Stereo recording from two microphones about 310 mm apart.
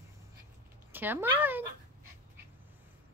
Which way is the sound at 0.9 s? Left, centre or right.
Centre.